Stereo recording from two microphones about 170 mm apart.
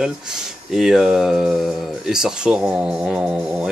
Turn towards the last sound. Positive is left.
turn(degrees=-5)  # may be behind; listen again after turning